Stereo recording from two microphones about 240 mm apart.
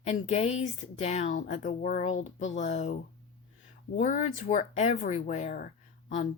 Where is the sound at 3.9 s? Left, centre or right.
Left.